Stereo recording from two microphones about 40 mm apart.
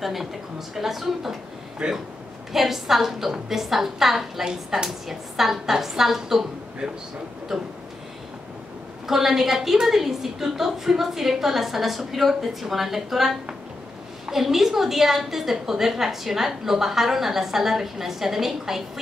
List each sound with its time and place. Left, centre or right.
0.0 s speech: centre
1.8 s speech: right
2.5 s a woman's voice: centre
9.0 s a woman's voice: centre